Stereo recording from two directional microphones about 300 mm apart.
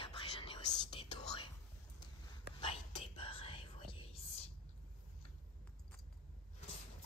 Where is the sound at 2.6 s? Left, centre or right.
Centre.